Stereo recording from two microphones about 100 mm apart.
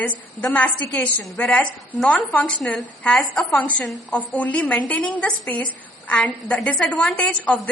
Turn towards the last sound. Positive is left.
turn(degrees=15)  # may be behind; listen again after turning